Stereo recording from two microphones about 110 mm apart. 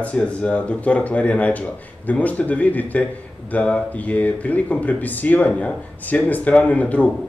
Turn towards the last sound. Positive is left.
turn(degrees=15)  # may be behind; listen again after turning